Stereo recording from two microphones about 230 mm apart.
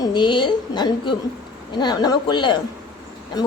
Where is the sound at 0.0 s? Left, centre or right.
Centre.